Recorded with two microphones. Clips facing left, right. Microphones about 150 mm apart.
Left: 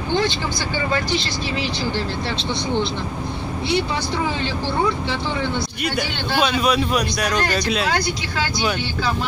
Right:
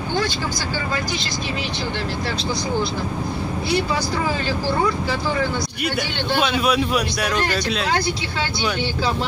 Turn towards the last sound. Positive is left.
turn(degrees=-5)  # may be behind; listen again after turning